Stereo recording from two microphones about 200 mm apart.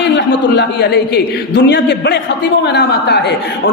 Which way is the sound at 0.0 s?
60° left (ahead or behind).